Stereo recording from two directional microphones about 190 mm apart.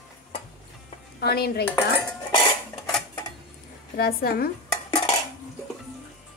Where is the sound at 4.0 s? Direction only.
50° left (ahead or behind).